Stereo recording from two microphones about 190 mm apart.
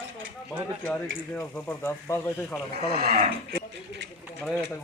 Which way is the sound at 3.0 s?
50° right (ahead or behind).